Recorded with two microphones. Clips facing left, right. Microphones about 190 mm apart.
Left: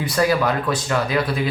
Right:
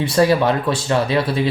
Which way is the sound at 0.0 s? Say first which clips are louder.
Right 4 dB; 25° right (ahead or behind).